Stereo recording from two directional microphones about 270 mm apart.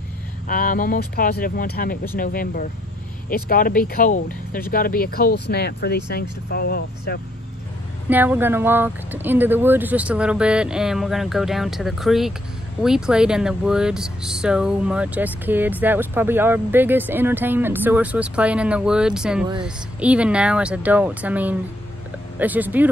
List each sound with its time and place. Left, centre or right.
0.5 s speech: left
8.1 s speech: centre